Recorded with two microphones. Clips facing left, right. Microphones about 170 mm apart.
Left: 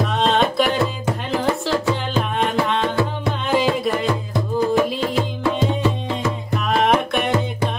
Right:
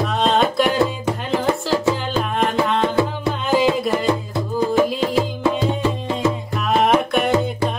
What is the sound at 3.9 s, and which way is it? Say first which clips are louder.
Music: right 2 dB; centre (ahead or behind).